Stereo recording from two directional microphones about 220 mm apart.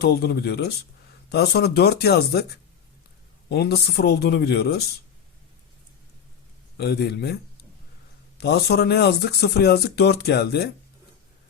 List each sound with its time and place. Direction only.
0.0 s speech: 45° left (ahead or behind)
3.5 s speech: 45° left (ahead or behind)
6.7 s speech: 50° left (ahead or behind)
8.4 s speech: 45° left (ahead or behind)